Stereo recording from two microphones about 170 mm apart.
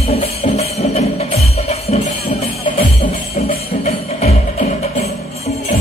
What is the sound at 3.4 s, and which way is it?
Music, 40° left (ahead or behind).